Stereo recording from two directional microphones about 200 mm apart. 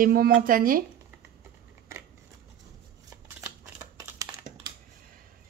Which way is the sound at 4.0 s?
15° right (ahead or behind).